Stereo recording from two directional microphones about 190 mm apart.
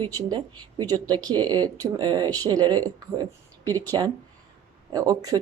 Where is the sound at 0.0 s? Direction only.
20° right (ahead or behind).